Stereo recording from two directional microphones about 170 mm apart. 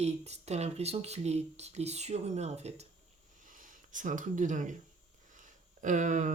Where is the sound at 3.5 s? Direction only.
50° right (ahead or behind).